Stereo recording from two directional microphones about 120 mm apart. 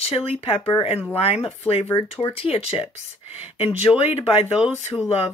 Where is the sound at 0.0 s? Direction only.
55° left (ahead or behind).